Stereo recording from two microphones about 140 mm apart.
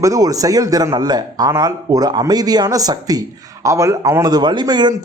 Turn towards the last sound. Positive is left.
turn(degrees=-30)  # may be behind; listen again after turning